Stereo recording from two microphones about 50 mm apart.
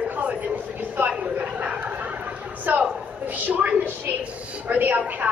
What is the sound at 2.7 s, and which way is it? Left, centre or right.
A woman's voice, right.